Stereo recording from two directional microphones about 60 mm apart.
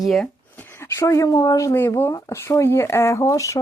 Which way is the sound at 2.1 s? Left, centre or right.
Left.